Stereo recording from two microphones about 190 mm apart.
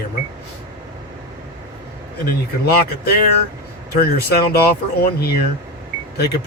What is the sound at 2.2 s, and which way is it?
Speech, 55° left (ahead or behind).